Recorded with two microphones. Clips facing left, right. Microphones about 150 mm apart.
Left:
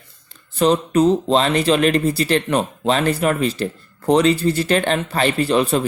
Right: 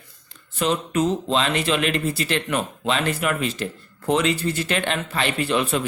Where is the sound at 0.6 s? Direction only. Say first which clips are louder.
Left 7 dB; 35° left (ahead or behind).